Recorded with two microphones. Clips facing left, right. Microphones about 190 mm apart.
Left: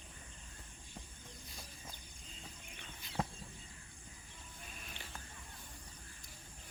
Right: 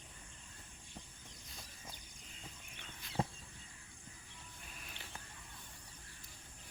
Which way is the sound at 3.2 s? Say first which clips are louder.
Right 1 dB; 30° right (ahead or behind).